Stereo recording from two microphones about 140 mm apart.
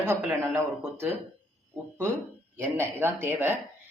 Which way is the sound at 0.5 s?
15° right (ahead or behind).